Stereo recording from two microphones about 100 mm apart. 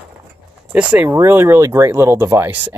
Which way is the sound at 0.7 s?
15° right (ahead or behind).